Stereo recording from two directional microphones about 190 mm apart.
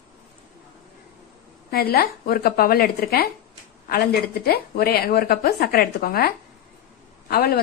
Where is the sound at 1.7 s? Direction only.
55° left (ahead or behind).